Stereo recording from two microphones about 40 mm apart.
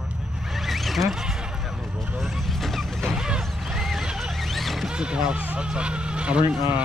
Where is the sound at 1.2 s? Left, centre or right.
Centre.